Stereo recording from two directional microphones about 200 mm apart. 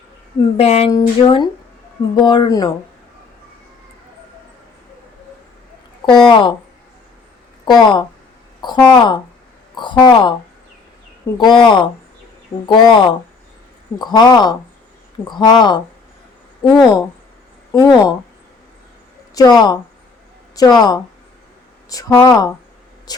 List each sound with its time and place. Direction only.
0.5 s speech: 30° left (ahead or behind)
6.2 s speech: 25° left (ahead or behind)
7.6 s speech: 20° left (ahead or behind)
11.3 s speech: 20° left (ahead or behind)
19.3 s speech: 20° left (ahead or behind)